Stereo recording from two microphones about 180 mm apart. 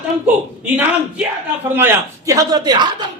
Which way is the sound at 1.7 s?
10° right (ahead or behind).